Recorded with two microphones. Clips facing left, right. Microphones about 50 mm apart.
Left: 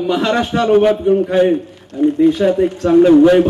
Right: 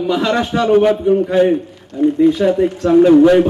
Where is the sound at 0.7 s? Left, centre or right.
Centre.